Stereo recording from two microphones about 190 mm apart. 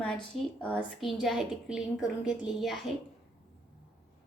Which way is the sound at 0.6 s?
5° left (ahead or behind).